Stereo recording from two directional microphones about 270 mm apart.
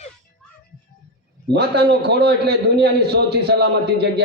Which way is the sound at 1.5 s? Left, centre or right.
Right.